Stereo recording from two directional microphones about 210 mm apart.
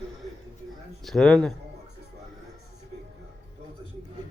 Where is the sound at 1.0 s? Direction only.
Centre (ahead or behind).